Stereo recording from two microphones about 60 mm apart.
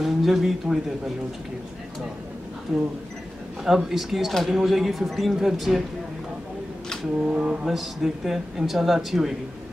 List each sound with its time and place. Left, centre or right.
0.0 s speech: centre
2.7 s speech: centre
7.2 s speech: centre
7.6 s speech: centre